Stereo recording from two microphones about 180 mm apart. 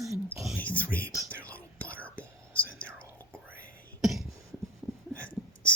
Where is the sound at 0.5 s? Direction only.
10° left (ahead or behind).